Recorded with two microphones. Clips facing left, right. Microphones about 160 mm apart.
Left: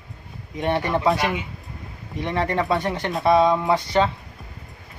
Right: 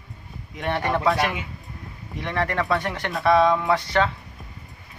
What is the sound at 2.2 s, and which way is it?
Speech, 25° left (ahead or behind).